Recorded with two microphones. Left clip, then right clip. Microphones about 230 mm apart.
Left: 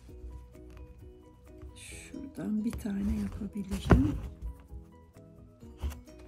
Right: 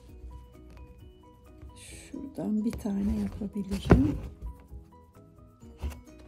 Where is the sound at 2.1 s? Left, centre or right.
Centre.